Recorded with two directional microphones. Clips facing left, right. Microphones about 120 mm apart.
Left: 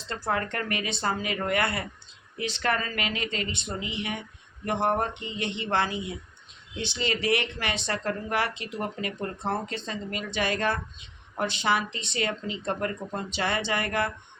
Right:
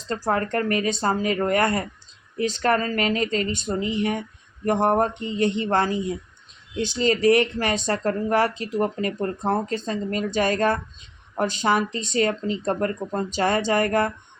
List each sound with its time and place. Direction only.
0.1 s speech: 40° right (ahead or behind)